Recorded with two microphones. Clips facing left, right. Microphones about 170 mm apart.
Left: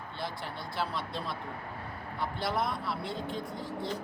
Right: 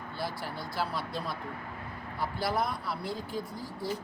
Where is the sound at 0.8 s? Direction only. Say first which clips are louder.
Right 1 dB; centre (ahead or behind).